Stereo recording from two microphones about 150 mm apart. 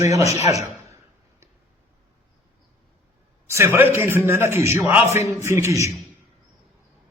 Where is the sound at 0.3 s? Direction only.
45° left (ahead or behind).